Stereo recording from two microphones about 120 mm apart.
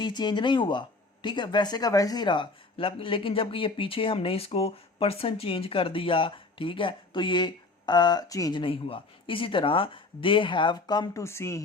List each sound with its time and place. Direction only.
0.0 s speech: 35° left (ahead or behind)
8.5 s speech: 50° left (ahead or behind)
11.2 s speech: 20° left (ahead or behind)